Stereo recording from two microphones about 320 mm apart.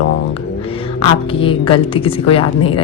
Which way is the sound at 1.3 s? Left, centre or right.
Centre.